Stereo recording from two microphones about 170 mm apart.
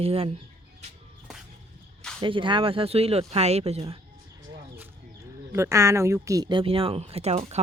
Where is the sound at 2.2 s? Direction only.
30° right (ahead or behind).